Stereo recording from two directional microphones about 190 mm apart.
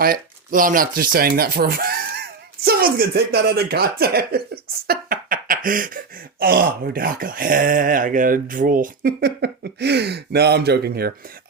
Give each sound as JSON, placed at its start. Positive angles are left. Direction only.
{"t": 0.0, "sound": "speech", "side_deg": -50}